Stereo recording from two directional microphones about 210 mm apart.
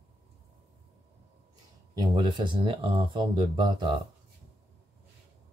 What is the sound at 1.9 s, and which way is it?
Speech, 20° right (ahead or behind).